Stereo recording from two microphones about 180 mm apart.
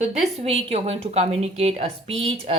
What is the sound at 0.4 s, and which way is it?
A woman's voice, 35° right (ahead or behind).